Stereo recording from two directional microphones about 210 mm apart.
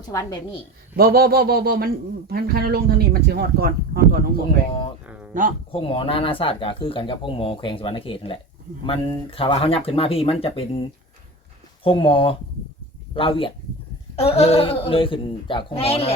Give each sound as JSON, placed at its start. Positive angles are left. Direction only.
{"t": 0.1, "sound": "a woman's voice", "side_deg": 15}
{"t": 0.9, "sound": "speech", "side_deg": -45}
{"t": 5.0, "sound": "a sound", "side_deg": -5}
{"t": 5.3, "sound": "speech", "side_deg": -40}
{"t": 5.7, "sound": "speech", "side_deg": 25}